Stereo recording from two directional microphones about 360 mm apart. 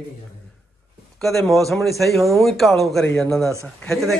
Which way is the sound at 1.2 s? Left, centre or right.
Centre.